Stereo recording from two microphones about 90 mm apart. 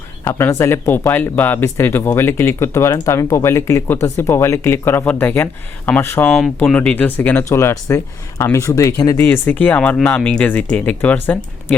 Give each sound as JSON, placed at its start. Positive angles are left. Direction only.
{"t": 0.3, "sound": "speech", "side_deg": 25}
{"t": 9.1, "sound": "speech", "side_deg": 25}